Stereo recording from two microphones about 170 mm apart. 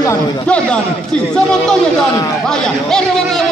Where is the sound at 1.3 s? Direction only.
5° left (ahead or behind).